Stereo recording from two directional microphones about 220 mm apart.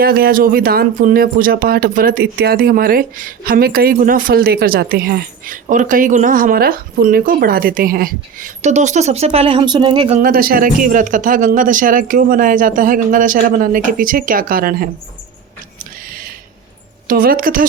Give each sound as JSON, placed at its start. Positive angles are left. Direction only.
{"t": 0.0, "sound": "speech", "side_deg": -45}
{"t": 10.2, "sound": "speech", "side_deg": -40}
{"t": 17.1, "sound": "speech", "side_deg": -40}